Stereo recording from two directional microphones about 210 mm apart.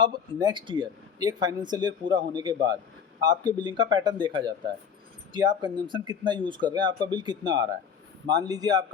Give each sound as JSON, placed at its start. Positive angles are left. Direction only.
{"t": 0.0, "sound": "a man's voice", "side_deg": -20}